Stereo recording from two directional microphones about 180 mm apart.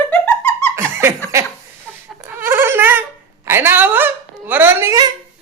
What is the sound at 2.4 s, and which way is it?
Speech, 10° right (ahead or behind).